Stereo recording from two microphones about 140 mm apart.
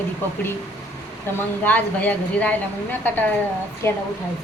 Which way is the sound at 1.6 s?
10° left (ahead or behind).